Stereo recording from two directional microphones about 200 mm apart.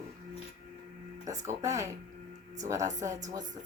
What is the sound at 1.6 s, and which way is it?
Speech, 15° right (ahead or behind).